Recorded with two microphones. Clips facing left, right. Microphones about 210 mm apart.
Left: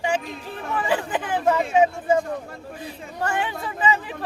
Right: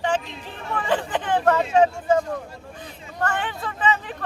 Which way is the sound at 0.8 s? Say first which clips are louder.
Even; 10° left (ahead or behind).